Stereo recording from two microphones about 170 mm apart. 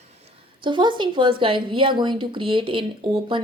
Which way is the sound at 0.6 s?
25° right (ahead or behind).